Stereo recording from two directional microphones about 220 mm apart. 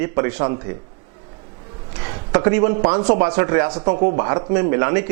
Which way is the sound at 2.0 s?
15° right (ahead or behind).